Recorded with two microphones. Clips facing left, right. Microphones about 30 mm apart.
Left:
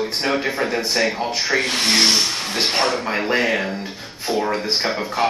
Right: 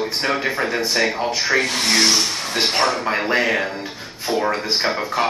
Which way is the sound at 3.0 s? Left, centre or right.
Centre.